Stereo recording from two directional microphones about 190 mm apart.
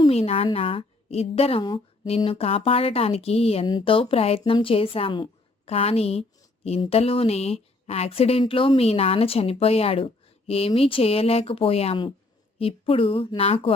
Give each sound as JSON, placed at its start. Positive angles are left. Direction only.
{"t": 0.0, "sound": "a woman's voice", "side_deg": 30}